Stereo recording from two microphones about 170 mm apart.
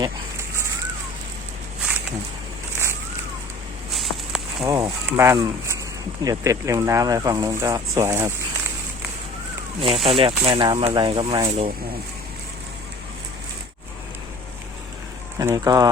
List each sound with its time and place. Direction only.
3.9 s a sound: centre (ahead or behind)
4.6 s speech: 20° right (ahead or behind)
9.8 s speech: 35° right (ahead or behind)
11.4 s speech: 35° right (ahead or behind)
15.4 s speech: 20° right (ahead or behind)